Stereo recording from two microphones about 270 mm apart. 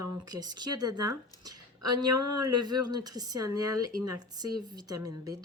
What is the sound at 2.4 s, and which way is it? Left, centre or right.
A woman's voice, centre.